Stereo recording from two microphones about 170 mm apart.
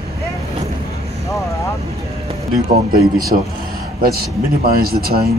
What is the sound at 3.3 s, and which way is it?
Speech, 55° right (ahead or behind).